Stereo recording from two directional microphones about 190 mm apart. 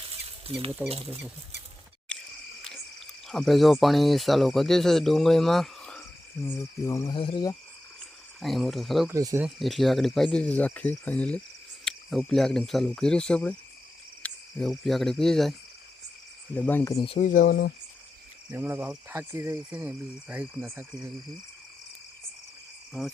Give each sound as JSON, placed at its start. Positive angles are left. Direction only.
{"t": 0.0, "sound": "a sound", "side_deg": -30}
{"t": 0.9, "sound": "speech", "side_deg": -30}
{"t": 3.2, "sound": "speech", "side_deg": 0}
{"t": 6.4, "sound": "cricket", "side_deg": 15}
{"t": 8.4, "sound": "speech", "side_deg": 0}
{"t": 9.0, "sound": "speech", "side_deg": -15}
{"t": 9.6, "sound": "speech", "side_deg": 0}
{"t": 14.2, "sound": "cricket", "side_deg": 5}
{"t": 16.6, "sound": "speech", "side_deg": 10}
{"t": 17.1, "sound": "speech", "side_deg": 40}
{"t": 18.5, "sound": "speech", "side_deg": -10}
{"t": 22.9, "sound": "insect", "side_deg": 0}